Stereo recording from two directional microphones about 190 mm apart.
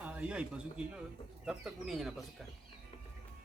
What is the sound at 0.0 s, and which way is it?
Speech, 5° right (ahead or behind).